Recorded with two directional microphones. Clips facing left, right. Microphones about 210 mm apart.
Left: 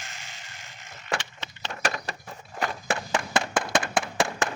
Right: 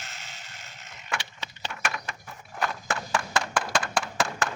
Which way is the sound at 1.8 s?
35° left (ahead or behind).